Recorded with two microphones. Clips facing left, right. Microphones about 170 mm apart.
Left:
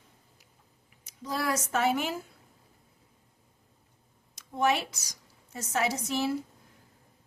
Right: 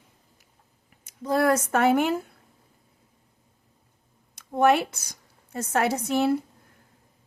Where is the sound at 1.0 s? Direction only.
55° right (ahead or behind).